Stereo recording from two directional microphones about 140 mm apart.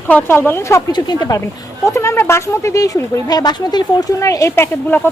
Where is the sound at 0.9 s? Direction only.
30° left (ahead or behind).